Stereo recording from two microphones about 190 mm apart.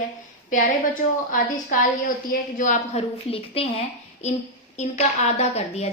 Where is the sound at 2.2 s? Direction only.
40° left (ahead or behind).